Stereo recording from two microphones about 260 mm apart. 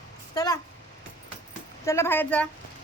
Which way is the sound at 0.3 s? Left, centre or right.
Centre.